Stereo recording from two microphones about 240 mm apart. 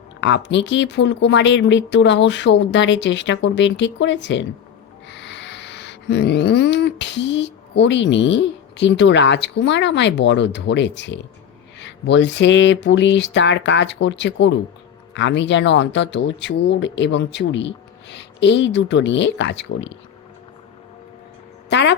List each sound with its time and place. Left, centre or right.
0.2 s speech: left
5.0 s a sound: left
11.8 s speech: left
21.7 s speech: left